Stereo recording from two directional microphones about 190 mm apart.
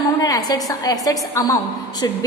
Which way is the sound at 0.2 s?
20° left (ahead or behind).